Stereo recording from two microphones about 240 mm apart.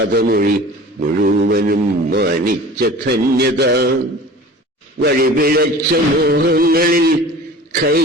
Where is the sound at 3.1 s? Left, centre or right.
Right.